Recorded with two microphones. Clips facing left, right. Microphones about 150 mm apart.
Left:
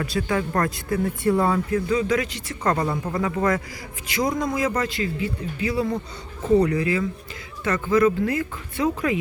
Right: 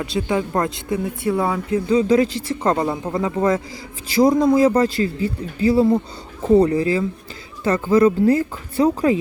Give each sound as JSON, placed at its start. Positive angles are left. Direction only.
{"t": 0.0, "sound": "speech", "side_deg": -20}
{"t": 1.7, "sound": "speech", "side_deg": -30}